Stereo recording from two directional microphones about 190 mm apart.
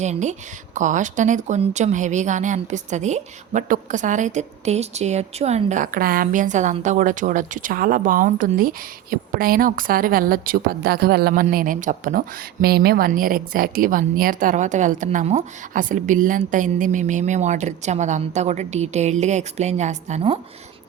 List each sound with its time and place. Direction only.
0.0 s a woman's voice: 40° right (ahead or behind)